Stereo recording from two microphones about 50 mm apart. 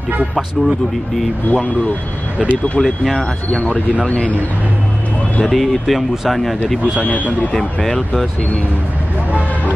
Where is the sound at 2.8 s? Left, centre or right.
Centre.